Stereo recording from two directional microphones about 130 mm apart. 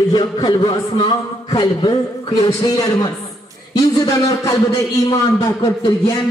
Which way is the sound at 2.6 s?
30° left (ahead or behind).